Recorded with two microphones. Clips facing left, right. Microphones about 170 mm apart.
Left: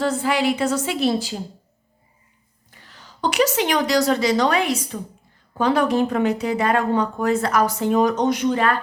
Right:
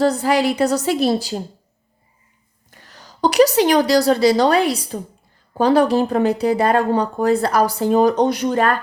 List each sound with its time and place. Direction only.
0.0 s speech: 40° right (ahead or behind)
2.6 s a woman's voice: 40° right (ahead or behind)